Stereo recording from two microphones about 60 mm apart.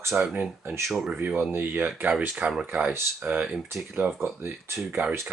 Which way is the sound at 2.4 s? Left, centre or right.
Right.